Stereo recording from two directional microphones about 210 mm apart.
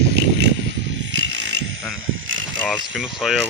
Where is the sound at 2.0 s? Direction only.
70° right (ahead or behind).